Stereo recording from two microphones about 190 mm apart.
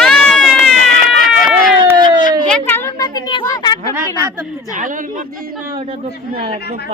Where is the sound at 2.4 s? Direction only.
5° left (ahead or behind).